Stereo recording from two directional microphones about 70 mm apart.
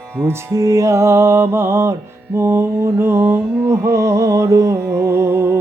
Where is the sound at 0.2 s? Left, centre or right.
Right.